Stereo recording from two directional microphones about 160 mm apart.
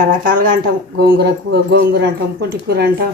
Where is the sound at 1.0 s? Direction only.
90° right.